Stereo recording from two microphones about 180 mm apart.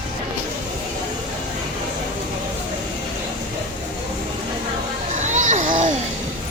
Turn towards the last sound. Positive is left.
turn(degrees=-45)  # may be behind; listen again after turning